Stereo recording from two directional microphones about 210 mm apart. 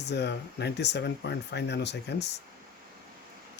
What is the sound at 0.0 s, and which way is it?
Speech, 55° left (ahead or behind).